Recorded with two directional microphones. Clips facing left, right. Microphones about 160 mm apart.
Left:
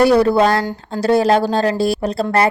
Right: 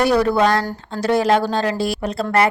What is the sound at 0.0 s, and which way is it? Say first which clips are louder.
A woman's voice: left 4 dB; 30° left (ahead or behind).